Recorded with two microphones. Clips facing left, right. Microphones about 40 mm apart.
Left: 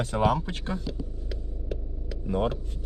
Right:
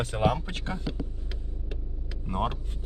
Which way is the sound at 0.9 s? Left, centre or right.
Right.